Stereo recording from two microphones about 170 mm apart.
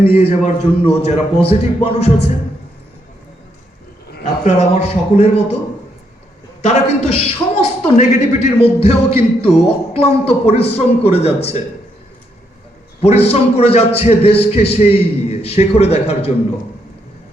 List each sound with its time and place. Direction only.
0.1 s a man's voice: 35° left (ahead or behind)
4.4 s a man's voice: 40° left (ahead or behind)
6.6 s a man's voice: 40° left (ahead or behind)
13.0 s a man's voice: 40° left (ahead or behind)